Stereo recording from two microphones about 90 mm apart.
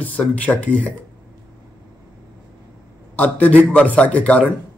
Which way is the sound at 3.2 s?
20° left (ahead or behind).